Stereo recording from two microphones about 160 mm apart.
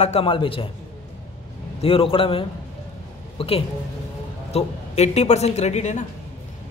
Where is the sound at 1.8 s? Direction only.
35° left (ahead or behind).